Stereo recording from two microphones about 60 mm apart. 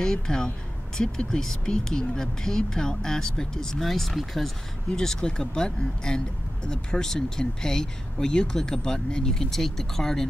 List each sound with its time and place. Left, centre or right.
0.0 s speech: centre